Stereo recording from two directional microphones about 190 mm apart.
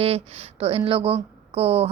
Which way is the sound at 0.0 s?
30° right (ahead or behind).